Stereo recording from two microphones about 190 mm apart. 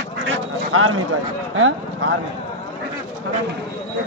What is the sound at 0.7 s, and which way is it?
Speech, 90° right.